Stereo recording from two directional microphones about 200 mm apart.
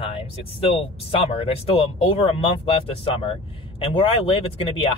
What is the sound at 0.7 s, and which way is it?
Speech, 30° left (ahead or behind).